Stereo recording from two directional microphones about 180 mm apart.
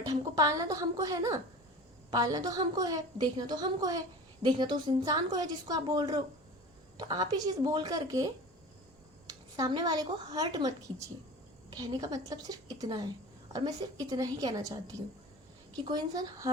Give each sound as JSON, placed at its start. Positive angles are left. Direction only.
{"t": 0.0, "sound": "a woman's voice", "side_deg": -20}